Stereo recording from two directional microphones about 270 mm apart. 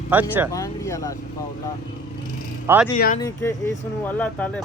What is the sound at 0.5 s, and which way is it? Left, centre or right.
Speech, centre.